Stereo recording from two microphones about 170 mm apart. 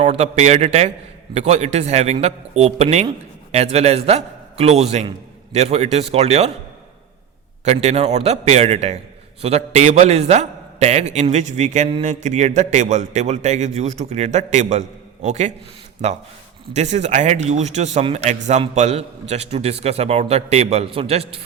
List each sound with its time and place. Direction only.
0.0 s a man's voice: 40° right (ahead or behind)
7.6 s a man's voice: 40° right (ahead or behind)
16.7 s a man's voice: 45° right (ahead or behind)